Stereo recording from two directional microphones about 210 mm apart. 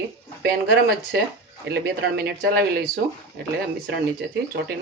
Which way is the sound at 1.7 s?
45° right (ahead or behind).